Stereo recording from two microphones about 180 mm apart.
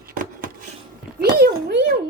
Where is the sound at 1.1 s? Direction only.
60° right (ahead or behind).